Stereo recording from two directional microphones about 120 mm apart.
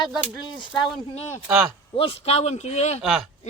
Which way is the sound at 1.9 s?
55° left (ahead or behind).